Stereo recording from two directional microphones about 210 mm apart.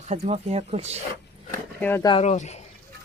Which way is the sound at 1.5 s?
15° left (ahead or behind).